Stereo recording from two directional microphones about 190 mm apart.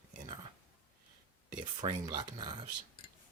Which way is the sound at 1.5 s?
25° right (ahead or behind).